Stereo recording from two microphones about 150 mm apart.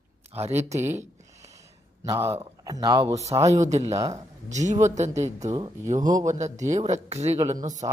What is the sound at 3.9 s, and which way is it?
Speech, 20° right (ahead or behind).